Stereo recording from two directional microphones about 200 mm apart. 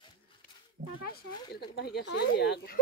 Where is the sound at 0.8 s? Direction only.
45° right (ahead or behind).